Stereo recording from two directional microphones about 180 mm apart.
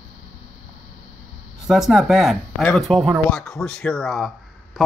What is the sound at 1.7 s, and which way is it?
Speech, centre (ahead or behind).